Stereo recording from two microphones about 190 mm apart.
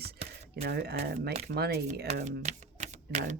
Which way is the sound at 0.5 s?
60° right (ahead or behind).